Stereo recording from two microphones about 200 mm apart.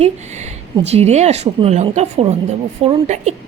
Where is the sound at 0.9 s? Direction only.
30° right (ahead or behind).